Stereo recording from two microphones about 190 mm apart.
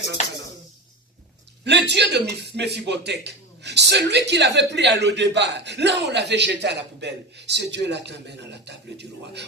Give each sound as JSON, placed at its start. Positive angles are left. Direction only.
{"t": 1.6, "sound": "a man's voice", "side_deg": -65}